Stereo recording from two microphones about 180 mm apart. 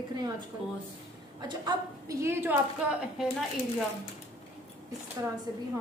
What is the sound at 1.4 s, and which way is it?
A woman's voice, 20° right (ahead or behind).